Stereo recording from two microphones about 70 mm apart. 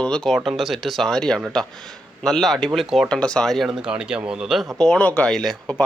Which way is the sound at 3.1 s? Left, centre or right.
Centre.